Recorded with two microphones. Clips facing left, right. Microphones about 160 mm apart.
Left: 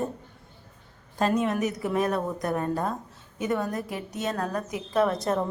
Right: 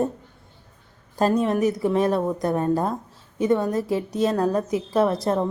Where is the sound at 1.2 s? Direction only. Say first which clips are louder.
Right 4 dB; 35° right (ahead or behind).